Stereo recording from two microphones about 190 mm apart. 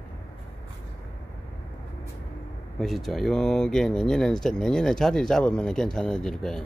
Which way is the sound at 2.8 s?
Centre (ahead or behind).